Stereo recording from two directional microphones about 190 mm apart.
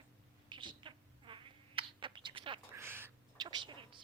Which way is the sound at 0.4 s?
25° right (ahead or behind).